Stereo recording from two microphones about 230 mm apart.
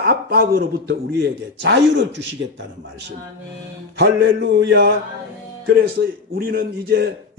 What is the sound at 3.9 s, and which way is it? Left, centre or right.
A man's voice, right.